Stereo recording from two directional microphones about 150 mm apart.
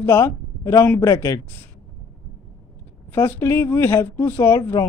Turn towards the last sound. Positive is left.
turn(degrees=15)  # may be behind; listen again after turning